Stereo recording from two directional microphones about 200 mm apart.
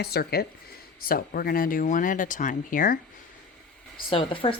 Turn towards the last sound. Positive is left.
turn(degrees=25)  # may be behind; listen again after turning